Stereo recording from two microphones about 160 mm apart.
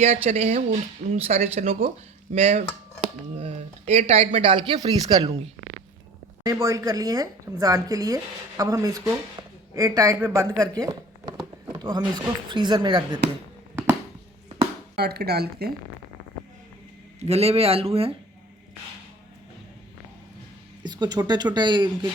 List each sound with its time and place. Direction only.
0.3 s speech: 45° right (ahead or behind); by 5.3 s 25° right (ahead or behind)
6.4 s speech: 20° right (ahead or behind)
9.4 s a sound: 25° right (ahead or behind)
9.7 s speech: 20° right (ahead or behind)
14.9 s speech: 85° right
17.2 s speech: 40° right (ahead or behind)
20.8 s speech: 25° right (ahead or behind)